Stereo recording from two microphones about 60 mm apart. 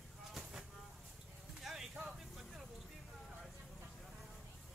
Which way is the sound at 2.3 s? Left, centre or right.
Centre.